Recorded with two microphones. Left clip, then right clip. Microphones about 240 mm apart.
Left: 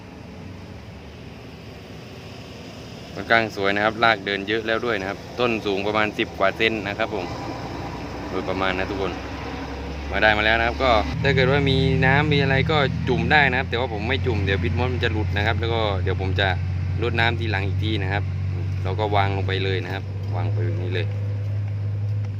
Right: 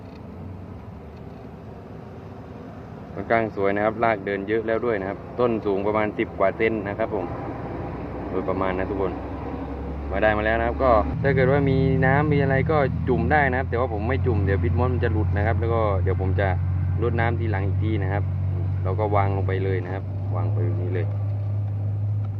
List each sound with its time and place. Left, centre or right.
3.2 s speech: centre
9.0 s vehicle: left
10.2 s speech: centre